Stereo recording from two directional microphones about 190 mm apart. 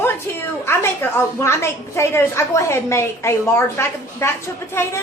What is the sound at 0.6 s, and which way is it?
A woman's voice, 10° left (ahead or behind).